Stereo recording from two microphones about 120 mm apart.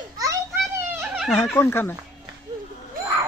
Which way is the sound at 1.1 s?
Centre (ahead or behind).